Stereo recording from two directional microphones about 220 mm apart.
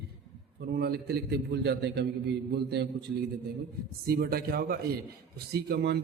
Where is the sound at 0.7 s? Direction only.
45° right (ahead or behind).